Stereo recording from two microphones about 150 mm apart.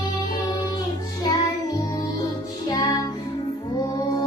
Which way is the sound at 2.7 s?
25° left (ahead or behind).